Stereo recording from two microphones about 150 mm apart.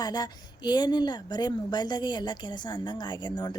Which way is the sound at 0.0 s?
25° left (ahead or behind).